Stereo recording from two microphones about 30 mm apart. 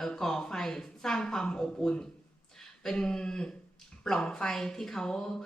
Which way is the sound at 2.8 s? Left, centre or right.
Left.